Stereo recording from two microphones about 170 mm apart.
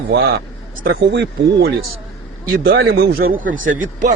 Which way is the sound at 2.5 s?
65° right (ahead or behind).